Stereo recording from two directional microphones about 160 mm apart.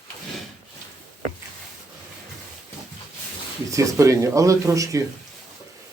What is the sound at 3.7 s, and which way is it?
Speech, 20° right (ahead or behind).